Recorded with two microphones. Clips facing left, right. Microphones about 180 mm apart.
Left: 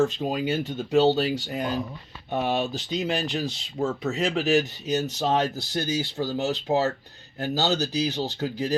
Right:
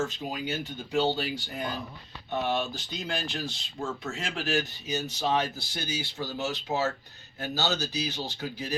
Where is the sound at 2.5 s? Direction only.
75° left (ahead or behind).